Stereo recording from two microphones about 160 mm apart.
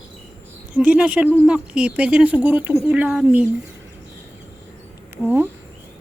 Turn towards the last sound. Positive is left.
turn(degrees=15)  # may be behind; listen again after turning